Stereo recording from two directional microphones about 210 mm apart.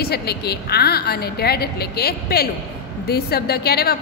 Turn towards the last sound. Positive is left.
turn(degrees=50)  # may be behind; listen again after turning